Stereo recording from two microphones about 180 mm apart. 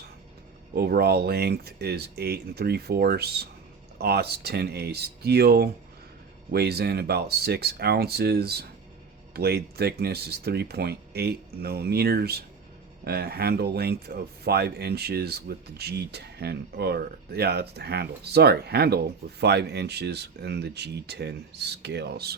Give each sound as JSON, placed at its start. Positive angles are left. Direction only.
{"t": 0.7, "sound": "speech", "side_deg": -60}